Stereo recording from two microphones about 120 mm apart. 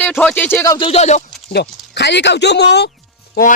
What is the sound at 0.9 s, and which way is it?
Speech, 70° left (ahead or behind).